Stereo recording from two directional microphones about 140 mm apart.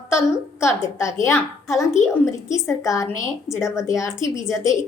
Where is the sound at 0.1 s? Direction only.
20° left (ahead or behind).